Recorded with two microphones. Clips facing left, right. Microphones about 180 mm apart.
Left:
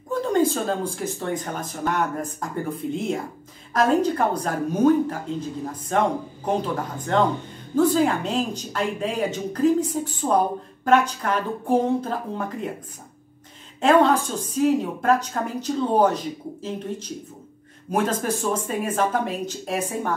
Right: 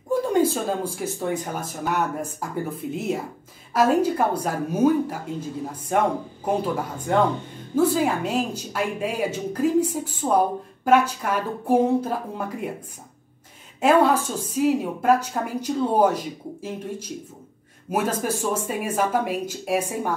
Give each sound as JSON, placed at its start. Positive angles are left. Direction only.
{"t": 0.1, "sound": "speech", "side_deg": -10}
{"t": 13.7, "sound": "speech", "side_deg": -10}
{"t": 17.9, "sound": "speech", "side_deg": -10}